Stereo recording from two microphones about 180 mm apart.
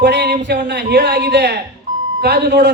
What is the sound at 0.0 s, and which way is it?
A man's voice, 70° right (ahead or behind).